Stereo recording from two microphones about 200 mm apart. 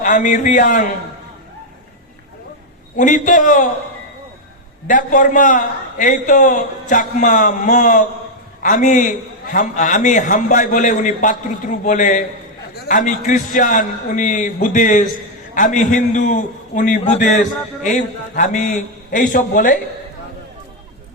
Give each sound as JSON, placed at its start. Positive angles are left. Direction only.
{"t": 0.0, "sound": "a man's voice", "side_deg": 40}
{"t": 3.0, "sound": "a man's voice", "side_deg": 40}
{"t": 4.9, "sound": "a man's voice", "side_deg": 40}